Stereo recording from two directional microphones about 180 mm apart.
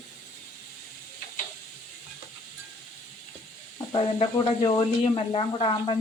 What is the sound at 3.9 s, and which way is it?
Speech, 30° left (ahead or behind).